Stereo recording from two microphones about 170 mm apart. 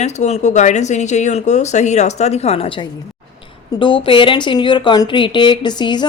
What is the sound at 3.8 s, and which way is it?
Speech, 30° left (ahead or behind).